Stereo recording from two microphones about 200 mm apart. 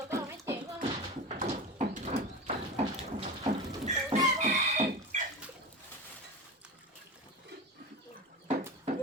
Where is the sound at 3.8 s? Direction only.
35° right (ahead or behind).